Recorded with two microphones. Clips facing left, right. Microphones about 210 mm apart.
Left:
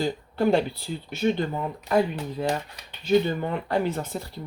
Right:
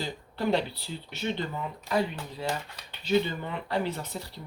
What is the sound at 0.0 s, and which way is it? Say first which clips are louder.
Speech: left 7 dB; 50° left (ahead or behind).